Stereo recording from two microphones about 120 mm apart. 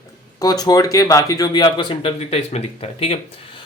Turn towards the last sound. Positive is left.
turn(degrees=55)  # may be behind; listen again after turning